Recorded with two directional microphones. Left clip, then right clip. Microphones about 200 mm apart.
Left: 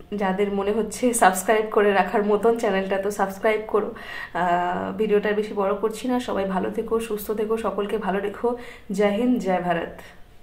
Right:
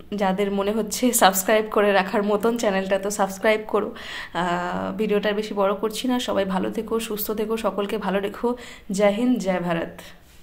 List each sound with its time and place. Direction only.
0.1 s speech: 35° right (ahead or behind)